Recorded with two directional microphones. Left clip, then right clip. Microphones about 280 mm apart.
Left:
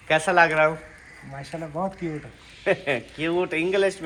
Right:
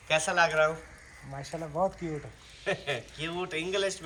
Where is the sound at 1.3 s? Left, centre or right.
Right.